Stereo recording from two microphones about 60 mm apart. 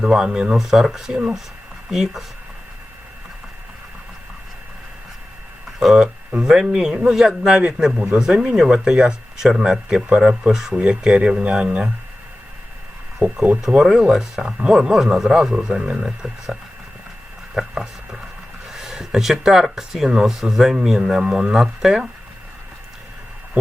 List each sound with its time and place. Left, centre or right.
0.0 s speech: centre
5.8 s speech: centre
10.8 s speech: centre
13.2 s speech: centre
18.7 s a sound: centre
19.4 s speech: centre